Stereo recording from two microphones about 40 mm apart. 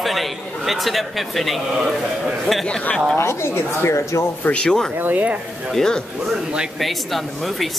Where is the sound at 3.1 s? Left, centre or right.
Left.